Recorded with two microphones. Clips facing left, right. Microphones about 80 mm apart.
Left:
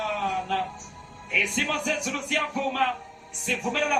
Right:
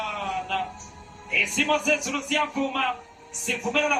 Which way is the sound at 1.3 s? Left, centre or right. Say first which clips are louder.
Right 3 dB; left.